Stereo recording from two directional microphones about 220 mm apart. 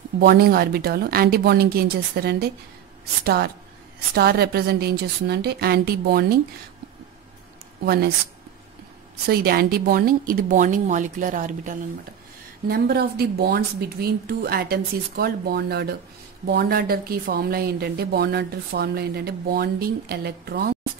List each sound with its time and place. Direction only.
0.2 s speech: 45° right (ahead or behind)
7.8 s speech: 45° right (ahead or behind)
9.2 s a woman's voice: 45° right (ahead or behind)